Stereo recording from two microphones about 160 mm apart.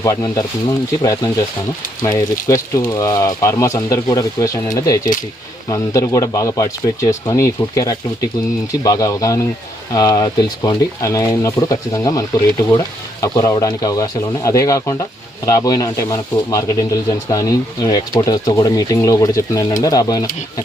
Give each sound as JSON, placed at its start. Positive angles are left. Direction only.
{"t": 0.0, "sound": "speech", "side_deg": 20}
{"t": 13.2, "sound": "speech", "side_deg": 20}